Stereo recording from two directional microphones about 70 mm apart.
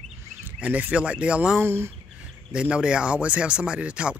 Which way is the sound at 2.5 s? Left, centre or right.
Centre.